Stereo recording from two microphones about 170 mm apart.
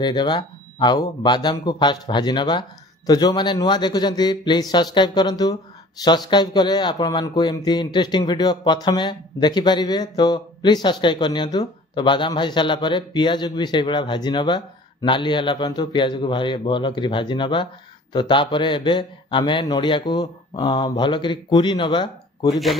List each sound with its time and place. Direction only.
0.0 s a man's voice: 25° left (ahead or behind)